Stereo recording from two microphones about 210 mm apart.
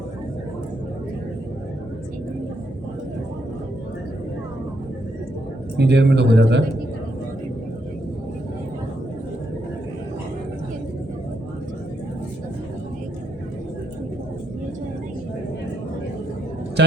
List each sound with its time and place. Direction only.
5.7 s a man's voice: 55° right (ahead or behind)